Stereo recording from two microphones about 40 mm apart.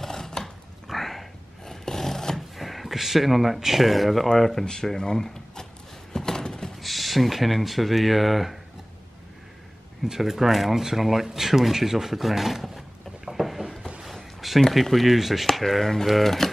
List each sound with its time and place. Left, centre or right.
0.0 s a sound: centre
2.5 s speech: centre
6.1 s a sound: centre
6.7 s speech: centre
10.0 s speech: centre
15.6 s speech: centre